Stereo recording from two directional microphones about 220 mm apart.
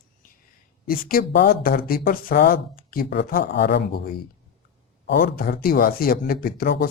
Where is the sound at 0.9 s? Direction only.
40° left (ahead or behind).